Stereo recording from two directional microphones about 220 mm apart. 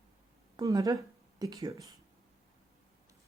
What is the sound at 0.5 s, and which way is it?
A woman's voice, 15° right (ahead or behind).